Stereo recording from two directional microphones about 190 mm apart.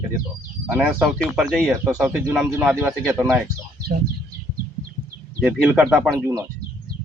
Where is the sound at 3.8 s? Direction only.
55° right (ahead or behind).